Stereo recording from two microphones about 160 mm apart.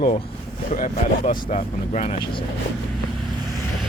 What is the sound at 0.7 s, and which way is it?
Speech, 50° left (ahead or behind).